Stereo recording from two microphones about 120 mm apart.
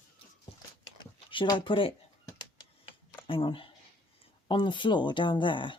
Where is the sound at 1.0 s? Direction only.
40° left (ahead or behind).